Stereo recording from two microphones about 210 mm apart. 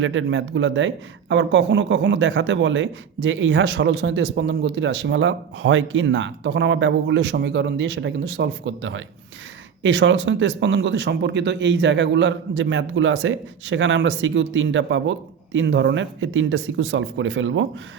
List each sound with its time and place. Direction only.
0.0 s speech: 65° right (ahead or behind)